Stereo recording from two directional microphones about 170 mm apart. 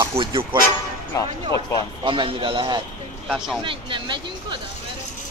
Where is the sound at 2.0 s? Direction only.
30° right (ahead or behind).